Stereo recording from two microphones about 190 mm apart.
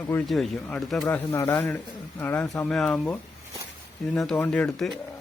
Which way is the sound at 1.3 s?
15° left (ahead or behind).